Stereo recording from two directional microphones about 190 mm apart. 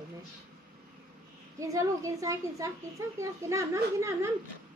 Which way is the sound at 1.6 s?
15° right (ahead or behind).